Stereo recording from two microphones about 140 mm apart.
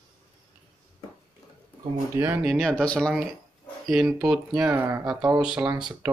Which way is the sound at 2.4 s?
Centre (ahead or behind).